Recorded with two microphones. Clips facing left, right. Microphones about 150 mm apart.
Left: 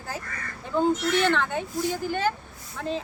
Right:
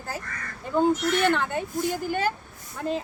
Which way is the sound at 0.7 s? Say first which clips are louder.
Right 1 dB; 10° right (ahead or behind).